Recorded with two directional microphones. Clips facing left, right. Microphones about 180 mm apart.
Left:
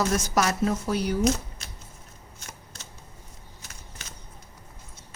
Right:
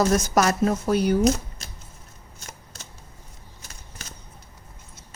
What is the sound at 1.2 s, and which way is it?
Shuffling cards, 35° right (ahead or behind).